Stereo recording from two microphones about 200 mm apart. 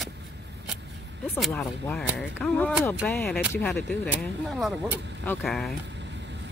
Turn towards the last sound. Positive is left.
turn(degrees=0)  # may be behind; listen again after turning